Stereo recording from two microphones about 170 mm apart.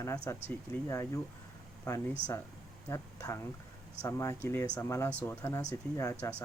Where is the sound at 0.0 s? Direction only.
15° left (ahead or behind).